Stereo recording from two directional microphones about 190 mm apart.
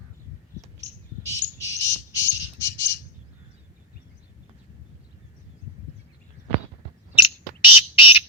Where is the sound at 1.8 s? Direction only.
70° left (ahead or behind).